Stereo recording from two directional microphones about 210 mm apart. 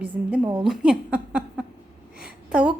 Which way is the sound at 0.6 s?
5° right (ahead or behind).